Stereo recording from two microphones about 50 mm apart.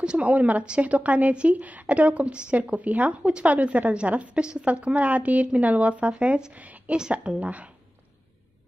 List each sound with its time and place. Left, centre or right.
0.0 s speech: right
7.0 s speech: centre